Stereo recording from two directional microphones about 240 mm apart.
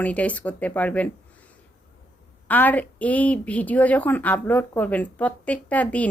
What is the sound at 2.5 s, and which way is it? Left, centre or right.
Speech, centre.